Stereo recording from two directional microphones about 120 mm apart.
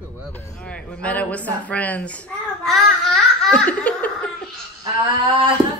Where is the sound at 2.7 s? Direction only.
Centre (ahead or behind).